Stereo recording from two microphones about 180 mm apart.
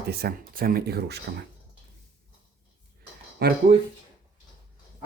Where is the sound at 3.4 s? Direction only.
60° right (ahead or behind).